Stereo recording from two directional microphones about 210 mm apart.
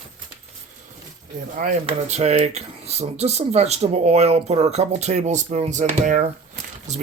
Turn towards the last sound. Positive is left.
turn(degrees=-35)  # may be behind; listen again after turning